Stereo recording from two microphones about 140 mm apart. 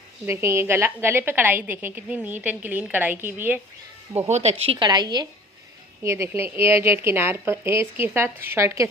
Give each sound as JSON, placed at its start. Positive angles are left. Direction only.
{"t": 0.3, "sound": "a woman's voice", "side_deg": -20}
{"t": 4.3, "sound": "speech", "side_deg": -50}
{"t": 4.9, "sound": "a woman's voice", "side_deg": -30}
{"t": 6.0, "sound": "a woman's voice", "side_deg": -20}